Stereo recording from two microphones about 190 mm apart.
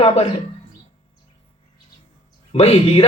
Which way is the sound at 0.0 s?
35° left (ahead or behind).